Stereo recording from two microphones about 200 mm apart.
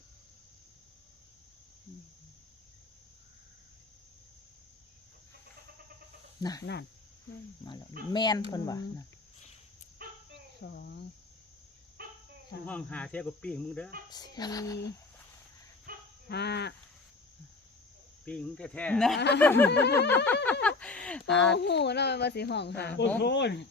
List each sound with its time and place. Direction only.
6.4 s speech: 20° left (ahead or behind)
10.6 s speech: 55° left (ahead or behind)
12.0 s a sound: 50° right (ahead or behind)
12.6 s speech: 5° left (ahead or behind)
14.1 s speech: 20° left (ahead or behind)
15.9 s a sound: 45° right (ahead or behind)
16.3 s speech: 55° left (ahead or behind)
18.3 s speech: 5° left (ahead or behind)
19.7 s speech: 55° left (ahead or behind)
20.1 s speech: 10° left (ahead or behind)
21.5 s speech: 60° left (ahead or behind)